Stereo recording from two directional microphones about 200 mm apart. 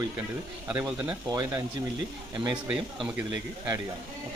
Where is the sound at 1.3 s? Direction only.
20° right (ahead or behind).